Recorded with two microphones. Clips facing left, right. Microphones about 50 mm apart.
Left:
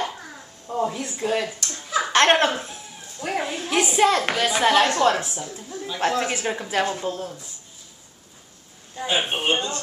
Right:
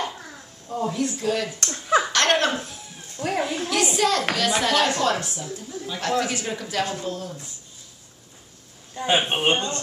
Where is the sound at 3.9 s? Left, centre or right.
Left.